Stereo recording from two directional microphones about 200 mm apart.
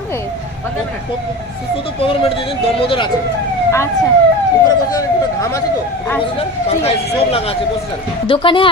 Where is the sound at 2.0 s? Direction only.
25° left (ahead or behind).